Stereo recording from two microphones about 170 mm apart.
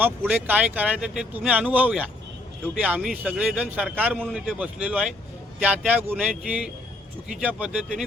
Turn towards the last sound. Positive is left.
turn(degrees=-10)  # may be behind; listen again after turning